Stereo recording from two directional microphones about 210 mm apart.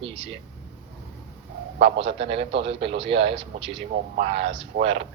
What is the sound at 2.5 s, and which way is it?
Speech, 25° right (ahead or behind).